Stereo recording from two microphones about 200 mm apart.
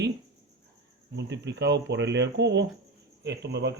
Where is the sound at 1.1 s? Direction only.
60° right (ahead or behind).